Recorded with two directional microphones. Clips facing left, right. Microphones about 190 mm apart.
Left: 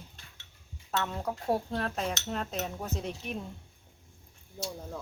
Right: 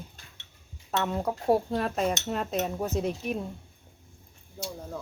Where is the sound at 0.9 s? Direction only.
15° right (ahead or behind).